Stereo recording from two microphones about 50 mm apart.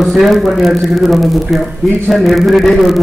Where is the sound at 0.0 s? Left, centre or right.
Centre.